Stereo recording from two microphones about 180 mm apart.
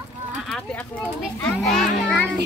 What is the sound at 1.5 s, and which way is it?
Speech, centre (ahead or behind).